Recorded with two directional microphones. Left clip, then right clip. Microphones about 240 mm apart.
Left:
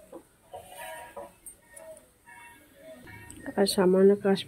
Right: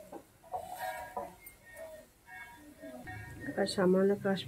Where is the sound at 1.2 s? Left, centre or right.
Centre.